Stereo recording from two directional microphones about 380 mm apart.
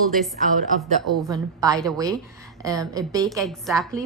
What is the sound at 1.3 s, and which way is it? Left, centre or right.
A woman's voice, centre.